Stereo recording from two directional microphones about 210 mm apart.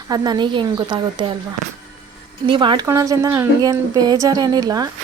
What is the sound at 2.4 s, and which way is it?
A woman's voice, 25° right (ahead or behind).